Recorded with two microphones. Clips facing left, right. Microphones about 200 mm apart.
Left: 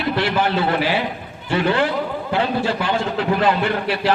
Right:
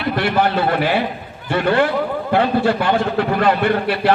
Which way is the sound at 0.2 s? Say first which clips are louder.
Right 3 dB; 55° right (ahead or behind).